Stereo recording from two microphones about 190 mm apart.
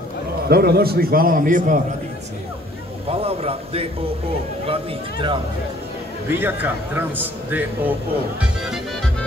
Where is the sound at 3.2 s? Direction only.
30° right (ahead or behind).